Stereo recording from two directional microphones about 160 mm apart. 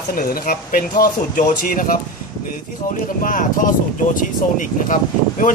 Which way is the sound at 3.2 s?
55° left (ahead or behind).